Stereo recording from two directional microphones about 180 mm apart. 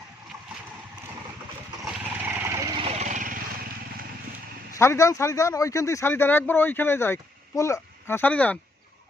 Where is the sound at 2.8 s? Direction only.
40° right (ahead or behind).